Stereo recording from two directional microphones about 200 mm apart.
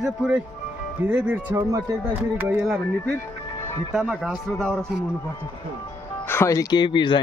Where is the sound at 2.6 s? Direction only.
Centre (ahead or behind).